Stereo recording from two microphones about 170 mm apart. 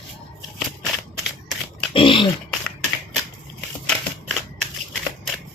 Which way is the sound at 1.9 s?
30° left (ahead or behind).